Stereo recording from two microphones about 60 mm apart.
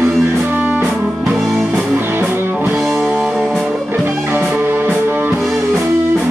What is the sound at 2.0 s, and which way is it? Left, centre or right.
Music, right.